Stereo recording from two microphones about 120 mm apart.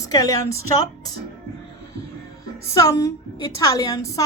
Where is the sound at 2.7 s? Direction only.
25° left (ahead or behind).